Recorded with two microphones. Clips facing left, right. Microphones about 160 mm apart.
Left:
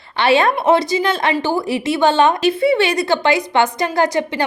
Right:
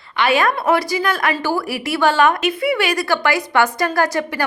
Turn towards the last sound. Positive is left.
turn(degrees=20)  # may be behind; listen again after turning